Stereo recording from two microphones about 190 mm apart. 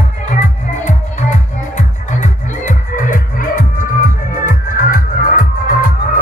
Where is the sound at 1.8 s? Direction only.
40° left (ahead or behind).